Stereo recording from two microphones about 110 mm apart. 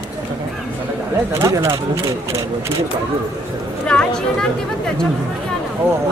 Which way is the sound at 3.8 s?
10° left (ahead or behind).